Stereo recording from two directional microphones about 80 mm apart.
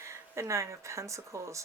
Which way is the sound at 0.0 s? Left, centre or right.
Right.